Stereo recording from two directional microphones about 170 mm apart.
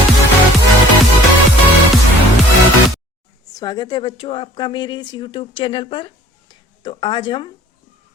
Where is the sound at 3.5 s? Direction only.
25° left (ahead or behind).